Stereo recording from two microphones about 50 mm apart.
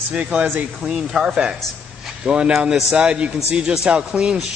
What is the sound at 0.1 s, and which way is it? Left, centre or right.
Speech, right.